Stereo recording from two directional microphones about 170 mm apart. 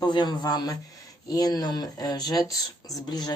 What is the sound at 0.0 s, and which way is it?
Speech, 25° left (ahead or behind).